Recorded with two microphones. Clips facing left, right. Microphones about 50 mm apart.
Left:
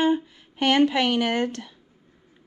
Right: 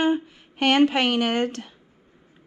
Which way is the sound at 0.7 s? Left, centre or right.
Right.